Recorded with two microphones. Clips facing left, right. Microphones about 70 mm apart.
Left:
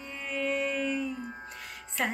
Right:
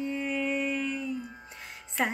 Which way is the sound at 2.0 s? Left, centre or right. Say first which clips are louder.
Right 2 dB; centre.